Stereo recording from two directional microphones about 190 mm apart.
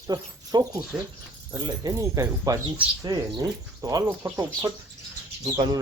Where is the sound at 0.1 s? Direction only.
20° right (ahead or behind).